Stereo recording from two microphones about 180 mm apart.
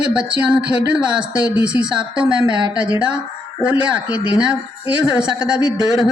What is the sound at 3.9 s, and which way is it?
Speech, 5° right (ahead or behind).